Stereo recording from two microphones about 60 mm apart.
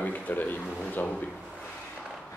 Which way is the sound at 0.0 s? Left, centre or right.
Left.